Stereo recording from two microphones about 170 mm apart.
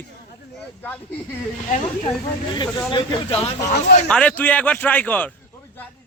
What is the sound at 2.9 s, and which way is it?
Speech, 30° left (ahead or behind).